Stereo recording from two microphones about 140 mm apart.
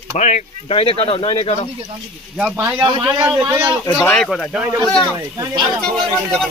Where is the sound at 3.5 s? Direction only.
20° right (ahead or behind).